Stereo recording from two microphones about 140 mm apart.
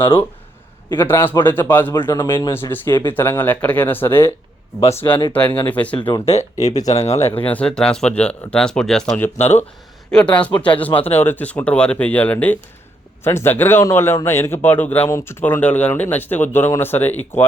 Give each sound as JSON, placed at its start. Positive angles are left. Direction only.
{"t": 0.9, "sound": "speech", "side_deg": 15}
{"t": 5.3, "sound": "speech", "side_deg": 10}
{"t": 6.0, "sound": "speech", "side_deg": 35}
{"t": 6.3, "sound": "speech", "side_deg": 55}
{"t": 7.3, "sound": "speech", "side_deg": 10}
{"t": 9.4, "sound": "speech", "side_deg": 50}
{"t": 10.1, "sound": "speech", "side_deg": 10}